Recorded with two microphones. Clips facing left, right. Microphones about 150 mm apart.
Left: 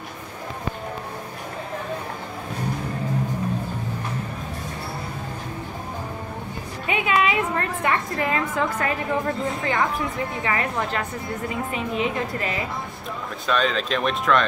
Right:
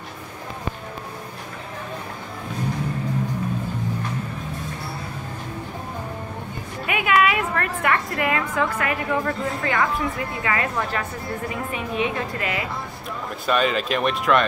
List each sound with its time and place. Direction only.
6.9 s a woman's voice: 25° left (ahead or behind)
13.5 s speech: 5° right (ahead or behind)